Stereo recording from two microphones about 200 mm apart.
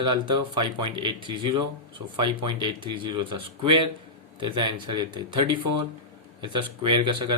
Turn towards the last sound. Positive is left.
turn(degrees=-25)  # may be behind; listen again after turning